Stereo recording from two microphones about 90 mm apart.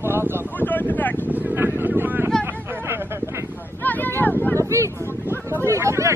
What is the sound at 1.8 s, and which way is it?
Vehicle, 20° right (ahead or behind).